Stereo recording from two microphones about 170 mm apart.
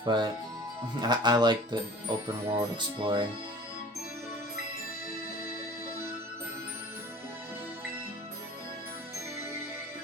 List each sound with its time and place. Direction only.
0.0 s speech: 25° right (ahead or behind)